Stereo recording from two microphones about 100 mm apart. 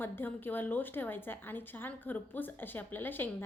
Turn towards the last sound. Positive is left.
turn(degrees=20)  # may be behind; listen again after turning